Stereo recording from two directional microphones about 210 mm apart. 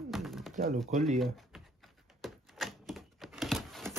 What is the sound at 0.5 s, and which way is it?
Speech, 35° right (ahead or behind).